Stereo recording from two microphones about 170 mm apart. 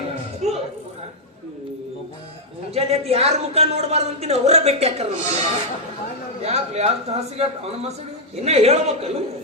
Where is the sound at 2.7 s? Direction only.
35° right (ahead or behind).